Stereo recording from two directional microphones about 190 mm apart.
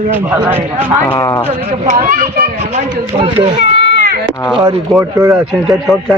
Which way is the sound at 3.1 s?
25° right (ahead or behind).